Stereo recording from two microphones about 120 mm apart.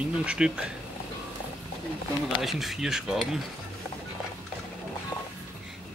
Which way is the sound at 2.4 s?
Centre (ahead or behind).